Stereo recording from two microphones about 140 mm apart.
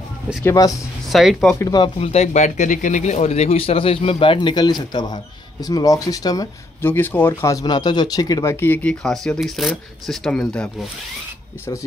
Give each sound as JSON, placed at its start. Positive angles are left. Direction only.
{"t": 0.4, "sound": "speech", "side_deg": 20}
{"t": 1.0, "sound": "speech", "side_deg": 0}
{"t": 1.6, "sound": "speech", "side_deg": 30}
{"t": 2.0, "sound": "speech", "side_deg": 45}
{"t": 6.8, "sound": "speech", "side_deg": 15}